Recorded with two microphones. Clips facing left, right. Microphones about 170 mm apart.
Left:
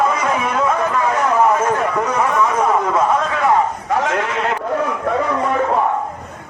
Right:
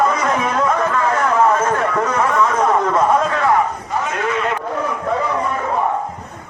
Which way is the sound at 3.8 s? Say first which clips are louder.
Left 2 dB; 80° left.